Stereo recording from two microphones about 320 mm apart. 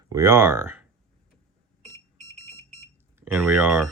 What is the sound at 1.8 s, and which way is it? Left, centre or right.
Smoke detector, centre.